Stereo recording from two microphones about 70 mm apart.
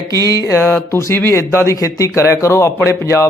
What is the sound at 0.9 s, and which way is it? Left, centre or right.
Speech, left.